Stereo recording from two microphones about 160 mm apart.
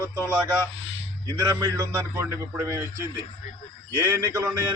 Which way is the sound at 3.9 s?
15° right (ahead or behind).